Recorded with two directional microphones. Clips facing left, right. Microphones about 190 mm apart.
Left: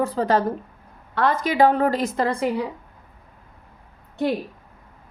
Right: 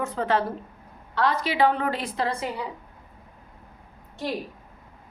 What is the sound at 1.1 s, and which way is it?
A woman's voice, 50° left (ahead or behind).